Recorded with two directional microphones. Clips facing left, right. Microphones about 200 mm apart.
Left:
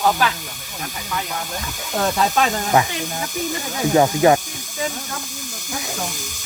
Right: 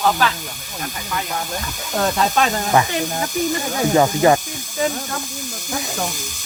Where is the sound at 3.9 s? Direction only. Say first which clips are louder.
Left 1 dB; 5° left (ahead or behind).